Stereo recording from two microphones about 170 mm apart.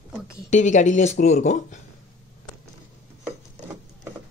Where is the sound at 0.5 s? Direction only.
45° left (ahead or behind).